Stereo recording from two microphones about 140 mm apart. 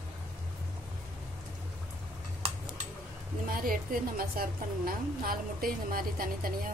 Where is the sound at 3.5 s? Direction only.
85° right.